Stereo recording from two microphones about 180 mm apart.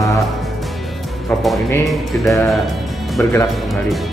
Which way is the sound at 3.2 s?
10° left (ahead or behind).